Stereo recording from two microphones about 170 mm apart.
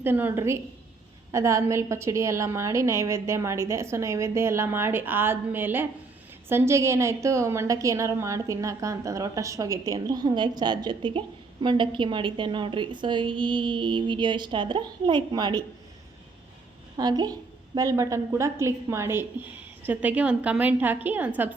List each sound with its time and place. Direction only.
0.0 s a woman's voice: 10° right (ahead or behind)
17.0 s a woman's voice: 25° right (ahead or behind)